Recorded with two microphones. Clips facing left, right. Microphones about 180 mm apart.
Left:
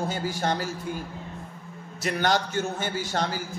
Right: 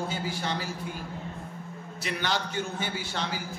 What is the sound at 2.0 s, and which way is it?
A man's voice, 45° left (ahead or behind).